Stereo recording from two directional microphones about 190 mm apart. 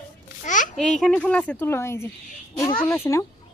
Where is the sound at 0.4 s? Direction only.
40° left (ahead or behind).